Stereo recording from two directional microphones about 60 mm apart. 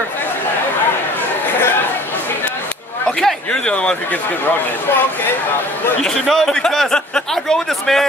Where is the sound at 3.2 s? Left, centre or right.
Centre.